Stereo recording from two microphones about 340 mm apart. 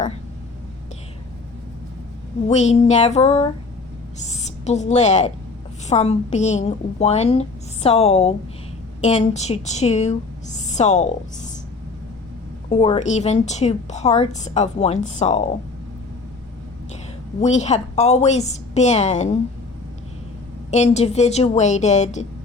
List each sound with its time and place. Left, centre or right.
2.5 s a woman's voice: centre
12.7 s a woman's voice: centre
17.4 s a woman's voice: centre
20.7 s a woman's voice: centre